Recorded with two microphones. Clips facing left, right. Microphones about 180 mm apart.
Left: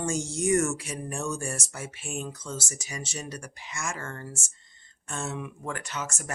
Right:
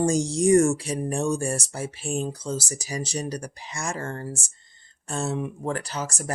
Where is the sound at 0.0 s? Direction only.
35° right (ahead or behind).